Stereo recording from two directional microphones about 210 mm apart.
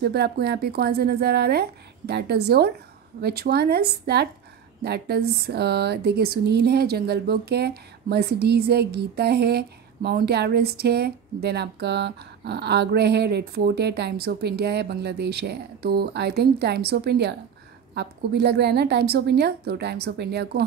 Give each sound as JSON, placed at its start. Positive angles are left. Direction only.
{"t": 0.0, "sound": "speech", "side_deg": -50}